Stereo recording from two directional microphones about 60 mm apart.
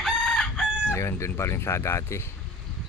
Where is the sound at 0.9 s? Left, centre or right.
Left.